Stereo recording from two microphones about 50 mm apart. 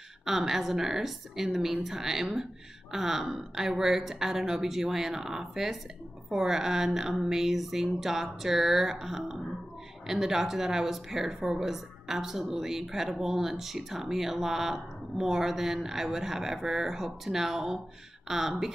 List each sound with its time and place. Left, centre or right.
0.2 s speech: centre